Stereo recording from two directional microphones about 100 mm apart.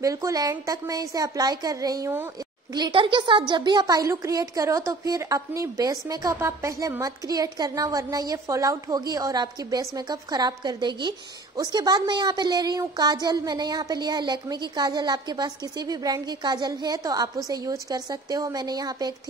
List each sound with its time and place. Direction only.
0.0 s speech: 35° right (ahead or behind)
2.9 s speech: 55° right (ahead or behind)